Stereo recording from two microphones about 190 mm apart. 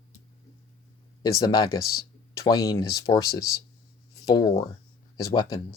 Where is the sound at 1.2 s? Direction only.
20° left (ahead or behind).